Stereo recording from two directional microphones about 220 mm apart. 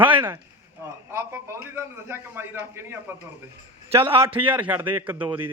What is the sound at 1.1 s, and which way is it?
A man's voice, 10° right (ahead or behind).